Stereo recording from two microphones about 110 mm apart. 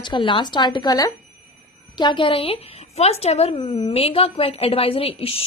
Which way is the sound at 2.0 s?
45° left (ahead or behind).